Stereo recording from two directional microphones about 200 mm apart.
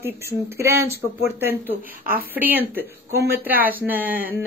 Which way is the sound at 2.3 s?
10° right (ahead or behind).